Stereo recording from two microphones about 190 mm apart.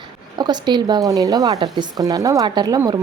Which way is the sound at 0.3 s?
20° right (ahead or behind).